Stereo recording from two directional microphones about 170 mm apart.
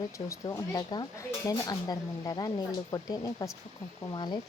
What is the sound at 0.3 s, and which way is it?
A woman's voice, 20° left (ahead or behind).